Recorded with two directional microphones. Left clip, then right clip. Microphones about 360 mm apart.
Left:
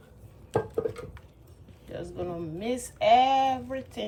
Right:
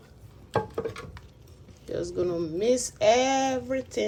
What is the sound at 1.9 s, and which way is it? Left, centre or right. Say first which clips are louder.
Speech: right 7 dB; centre.